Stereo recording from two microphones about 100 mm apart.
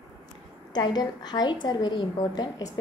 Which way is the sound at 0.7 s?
45° left (ahead or behind).